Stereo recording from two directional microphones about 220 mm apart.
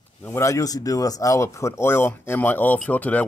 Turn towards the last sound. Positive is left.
turn(degrees=5)  # may be behind; listen again after turning